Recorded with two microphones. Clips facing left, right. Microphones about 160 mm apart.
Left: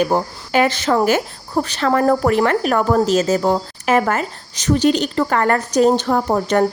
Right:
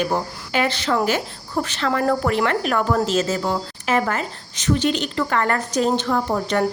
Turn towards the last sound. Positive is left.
turn(degrees=45)  # may be behind; listen again after turning